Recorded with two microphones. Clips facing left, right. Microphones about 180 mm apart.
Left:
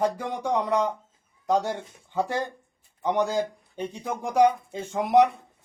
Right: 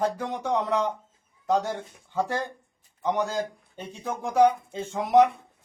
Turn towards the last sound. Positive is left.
turn(degrees=15)  # may be behind; listen again after turning